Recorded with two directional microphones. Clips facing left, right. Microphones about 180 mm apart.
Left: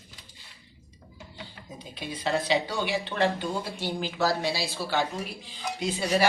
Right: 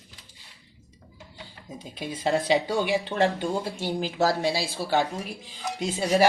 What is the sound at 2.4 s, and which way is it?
Speech, 45° right (ahead or behind).